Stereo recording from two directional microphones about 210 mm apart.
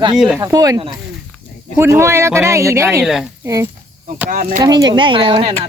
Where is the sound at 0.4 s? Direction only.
15° right (ahead or behind).